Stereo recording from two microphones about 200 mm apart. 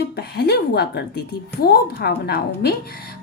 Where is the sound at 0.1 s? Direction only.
50° left (ahead or behind).